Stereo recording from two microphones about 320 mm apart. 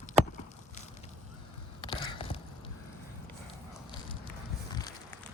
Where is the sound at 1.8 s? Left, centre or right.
Centre.